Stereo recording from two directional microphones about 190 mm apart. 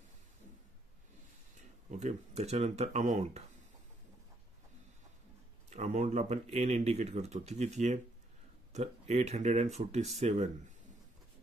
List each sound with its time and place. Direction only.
1.9 s speech: 35° right (ahead or behind)
5.7 s speech: 35° right (ahead or behind)